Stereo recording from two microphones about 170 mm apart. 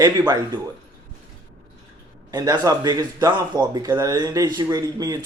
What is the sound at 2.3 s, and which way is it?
Speech, 20° right (ahead or behind).